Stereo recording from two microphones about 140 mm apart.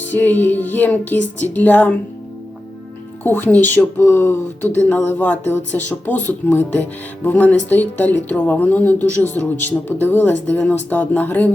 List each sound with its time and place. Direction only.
0.1 s speech: 15° left (ahead or behind)
3.2 s speech: 15° left (ahead or behind)